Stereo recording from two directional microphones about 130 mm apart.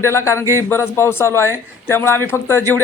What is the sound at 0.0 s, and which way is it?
A man's voice, 20° left (ahead or behind).